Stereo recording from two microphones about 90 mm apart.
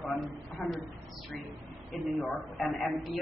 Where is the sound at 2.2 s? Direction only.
5° left (ahead or behind).